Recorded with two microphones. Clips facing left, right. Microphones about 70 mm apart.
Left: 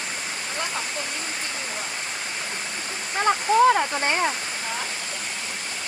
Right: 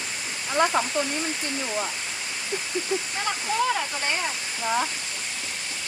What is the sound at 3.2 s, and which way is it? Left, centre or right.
Speech, left.